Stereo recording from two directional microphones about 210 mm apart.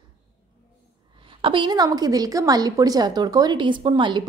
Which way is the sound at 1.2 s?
25° right (ahead or behind).